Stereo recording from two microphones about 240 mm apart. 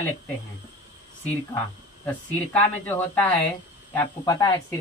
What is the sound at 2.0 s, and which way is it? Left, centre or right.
Speech, centre.